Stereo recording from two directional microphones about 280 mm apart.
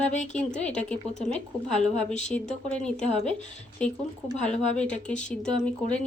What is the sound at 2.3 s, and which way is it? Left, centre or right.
Speech, centre.